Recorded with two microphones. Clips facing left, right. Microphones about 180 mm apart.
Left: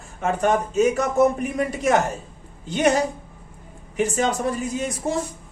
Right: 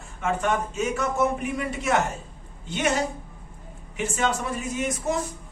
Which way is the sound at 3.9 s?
35° left (ahead or behind).